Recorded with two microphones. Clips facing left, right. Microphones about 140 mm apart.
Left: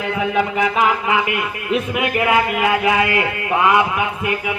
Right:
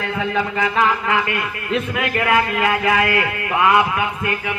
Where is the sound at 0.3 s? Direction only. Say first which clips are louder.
Left 1 dB; 15° left (ahead or behind).